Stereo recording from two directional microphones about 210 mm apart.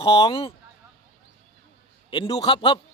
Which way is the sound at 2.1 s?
25° left (ahead or behind).